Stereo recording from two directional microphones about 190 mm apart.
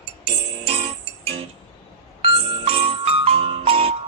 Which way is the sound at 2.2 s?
30° right (ahead or behind).